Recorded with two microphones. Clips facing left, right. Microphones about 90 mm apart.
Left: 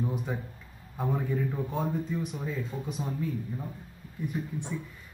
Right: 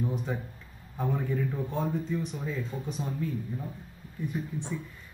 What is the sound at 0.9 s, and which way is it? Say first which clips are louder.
Speech: even; 10° left (ahead or behind).